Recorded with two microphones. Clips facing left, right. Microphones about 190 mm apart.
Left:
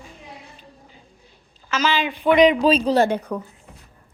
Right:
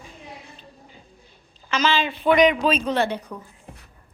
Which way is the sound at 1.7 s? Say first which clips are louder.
Even; 5° left (ahead or behind).